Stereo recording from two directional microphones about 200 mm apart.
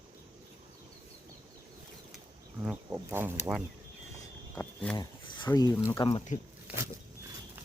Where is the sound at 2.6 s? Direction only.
10° right (ahead or behind).